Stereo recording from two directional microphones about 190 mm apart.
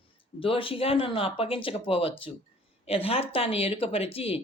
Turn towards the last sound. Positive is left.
turn(degrees=30)  # may be behind; listen again after turning